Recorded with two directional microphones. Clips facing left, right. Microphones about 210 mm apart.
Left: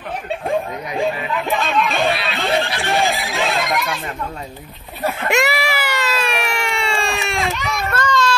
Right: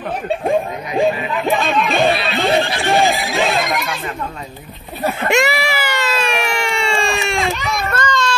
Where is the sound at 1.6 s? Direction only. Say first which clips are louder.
Right 2 dB; 15° right (ahead or behind).